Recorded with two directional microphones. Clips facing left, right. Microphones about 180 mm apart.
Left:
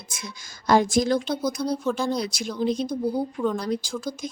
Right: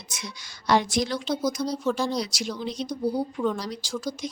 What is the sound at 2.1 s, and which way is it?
Speech, 55° left (ahead or behind).